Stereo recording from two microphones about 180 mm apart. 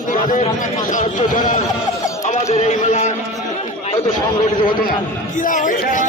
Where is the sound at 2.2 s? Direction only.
40° left (ahead or behind).